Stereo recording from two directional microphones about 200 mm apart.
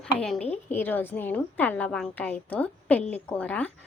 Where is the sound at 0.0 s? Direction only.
5° left (ahead or behind).